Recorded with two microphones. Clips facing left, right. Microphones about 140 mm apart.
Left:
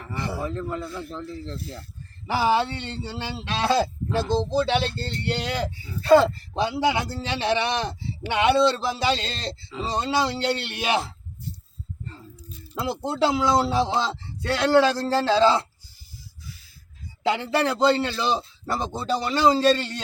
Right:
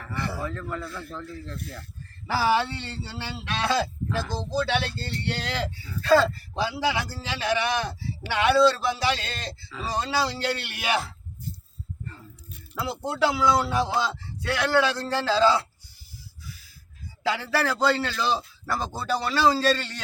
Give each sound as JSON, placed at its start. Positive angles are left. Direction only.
{"t": 0.0, "sound": "speech", "side_deg": 20}
{"t": 12.7, "sound": "speech", "side_deg": 20}
{"t": 17.2, "sound": "speech", "side_deg": 20}